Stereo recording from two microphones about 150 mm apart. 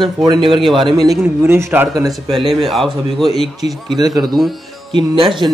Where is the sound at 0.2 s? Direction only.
30° right (ahead or behind).